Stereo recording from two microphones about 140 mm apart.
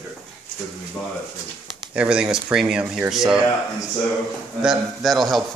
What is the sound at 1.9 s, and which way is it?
A man's voice, 10° right (ahead or behind).